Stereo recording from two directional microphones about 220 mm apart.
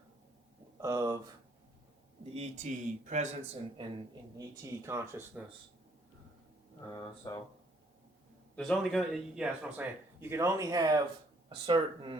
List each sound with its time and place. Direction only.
0.8 s speech: 15° right (ahead or behind)
2.3 s a man's voice: 30° right (ahead or behind)
4.4 s speech: 15° right (ahead or behind)
6.9 s speech: 15° left (ahead or behind)
8.5 s speech: centre (ahead or behind); by 12.1 s 25° right (ahead or behind)